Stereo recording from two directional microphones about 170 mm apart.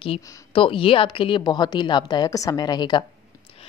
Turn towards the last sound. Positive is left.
turn(degrees=25)  # may be behind; listen again after turning